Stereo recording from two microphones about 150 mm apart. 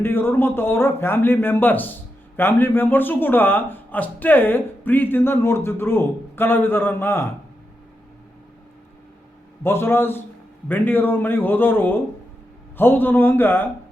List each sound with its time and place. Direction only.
0.0 s speech: 15° left (ahead or behind)
9.6 s speech: 15° left (ahead or behind)